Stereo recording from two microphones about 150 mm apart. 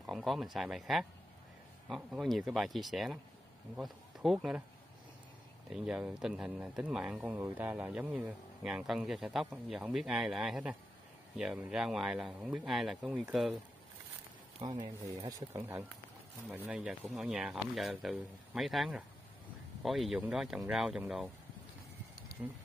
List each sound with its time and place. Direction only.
0.0 s speech: centre (ahead or behind)
2.1 s speech: centre (ahead or behind)
5.7 s speech: 5° right (ahead or behind)
14.7 s speech: 25° right (ahead or behind); by 21.3 s 5° right (ahead or behind)
22.3 s a sound: 90° left